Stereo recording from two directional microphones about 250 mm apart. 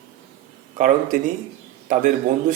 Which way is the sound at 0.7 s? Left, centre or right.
Right.